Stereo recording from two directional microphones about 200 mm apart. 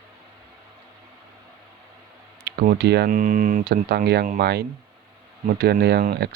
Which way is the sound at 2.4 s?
55° right (ahead or behind).